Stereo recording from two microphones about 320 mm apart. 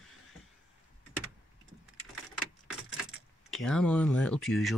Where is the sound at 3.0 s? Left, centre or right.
Centre.